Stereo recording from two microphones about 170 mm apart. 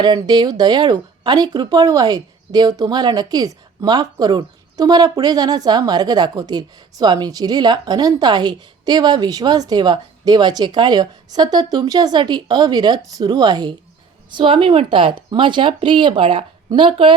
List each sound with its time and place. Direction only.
0.0 s speech: 25° right (ahead or behind)